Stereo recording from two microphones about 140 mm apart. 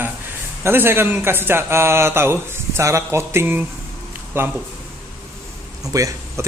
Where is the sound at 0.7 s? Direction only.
15° right (ahead or behind).